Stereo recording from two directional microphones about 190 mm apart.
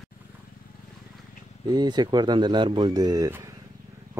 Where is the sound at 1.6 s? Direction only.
20° right (ahead or behind).